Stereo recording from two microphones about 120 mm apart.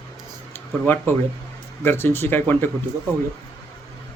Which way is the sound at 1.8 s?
20° left (ahead or behind).